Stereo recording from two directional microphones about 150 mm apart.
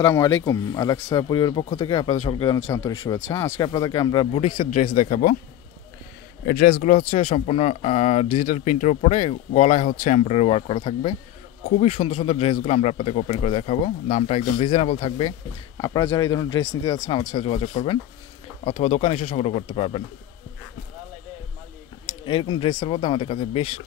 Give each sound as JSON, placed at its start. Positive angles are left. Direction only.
{"t": 0.0, "sound": "speech", "side_deg": 15}
{"t": 2.6, "sound": "speech", "side_deg": 15}
{"t": 5.0, "sound": "speech", "side_deg": 60}
{"t": 6.7, "sound": "speech", "side_deg": 60}
{"t": 7.1, "sound": "speech", "side_deg": 40}
{"t": 17.5, "sound": "speech", "side_deg": 40}
{"t": 18.7, "sound": "speech", "side_deg": 50}
{"t": 22.2, "sound": "speech", "side_deg": 30}